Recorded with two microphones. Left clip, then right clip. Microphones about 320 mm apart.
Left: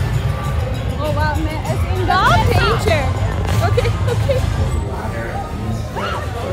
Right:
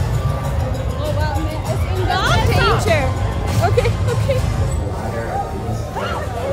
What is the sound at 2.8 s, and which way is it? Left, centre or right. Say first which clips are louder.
Music: even; centre.